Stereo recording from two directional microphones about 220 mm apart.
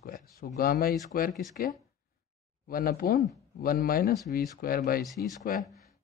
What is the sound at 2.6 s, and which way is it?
Speech, 40° left (ahead or behind).